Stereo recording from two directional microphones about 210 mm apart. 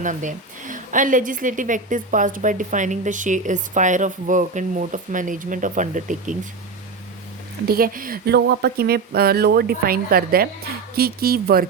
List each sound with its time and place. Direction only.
0.0 s a woman's voice: 35° right (ahead or behind)
7.7 s speech: 45° right (ahead or behind)